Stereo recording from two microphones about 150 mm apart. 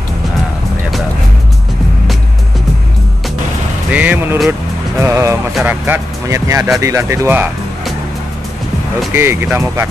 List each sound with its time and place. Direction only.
3.9 s music: 10° right (ahead or behind)
5.0 s speech: 20° right (ahead or behind)
9.1 s speech: 15° right (ahead or behind)